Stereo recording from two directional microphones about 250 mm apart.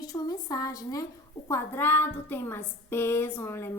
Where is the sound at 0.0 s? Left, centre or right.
Centre.